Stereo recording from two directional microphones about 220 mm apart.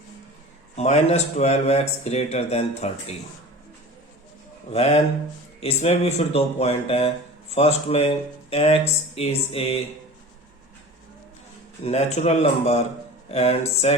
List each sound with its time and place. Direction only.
0.8 s speech: 30° left (ahead or behind)
4.7 s speech: 30° left (ahead or behind)
11.9 s speech: 30° left (ahead or behind)